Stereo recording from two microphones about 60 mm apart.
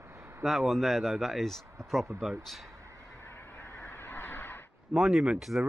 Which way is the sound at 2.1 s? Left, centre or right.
Centre.